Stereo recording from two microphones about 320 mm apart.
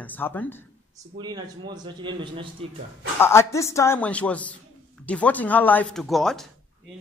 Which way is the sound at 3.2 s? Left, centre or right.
Centre.